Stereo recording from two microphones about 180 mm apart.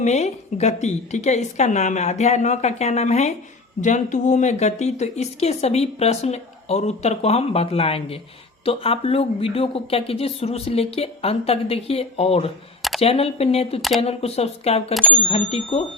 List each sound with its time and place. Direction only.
0.0 s a woman's voice: 40° left (ahead or behind)